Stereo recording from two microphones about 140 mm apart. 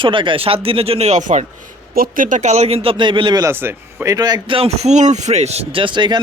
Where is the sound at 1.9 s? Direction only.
85° right; by 3.5 s 30° right (ahead or behind).